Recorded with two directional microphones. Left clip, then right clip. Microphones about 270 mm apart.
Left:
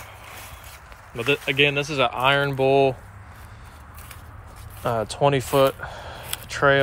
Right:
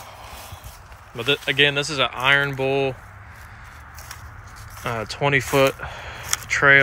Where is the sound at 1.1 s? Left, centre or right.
Centre.